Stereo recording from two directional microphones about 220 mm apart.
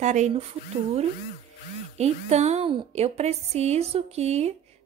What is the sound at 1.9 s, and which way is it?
A woman's voice, 30° right (ahead or behind).